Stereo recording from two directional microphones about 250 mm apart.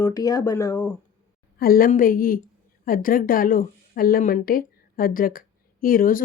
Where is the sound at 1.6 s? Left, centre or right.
Left.